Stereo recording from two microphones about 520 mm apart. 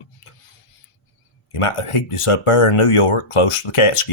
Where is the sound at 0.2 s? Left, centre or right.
Left.